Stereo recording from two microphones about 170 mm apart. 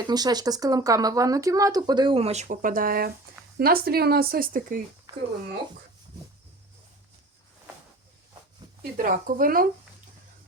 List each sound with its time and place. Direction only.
0.0 s speech: 25° right (ahead or behind); by 4.8 s 55° right (ahead or behind)
5.1 s a sound: 20° right (ahead or behind)
9.0 s speech: 55° right (ahead or behind)